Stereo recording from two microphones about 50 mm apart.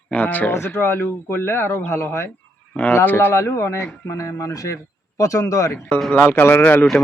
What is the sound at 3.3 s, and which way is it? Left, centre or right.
Speech, left.